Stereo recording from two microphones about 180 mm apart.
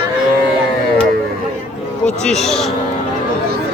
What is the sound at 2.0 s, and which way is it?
Speech, 5° left (ahead or behind).